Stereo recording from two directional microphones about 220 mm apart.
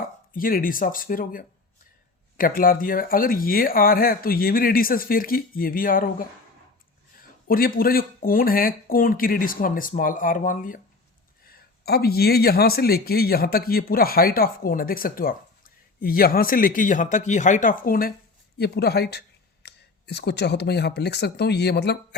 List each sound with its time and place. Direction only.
0.3 s speech: 40° left (ahead or behind)
7.4 s speech: 40° left (ahead or behind)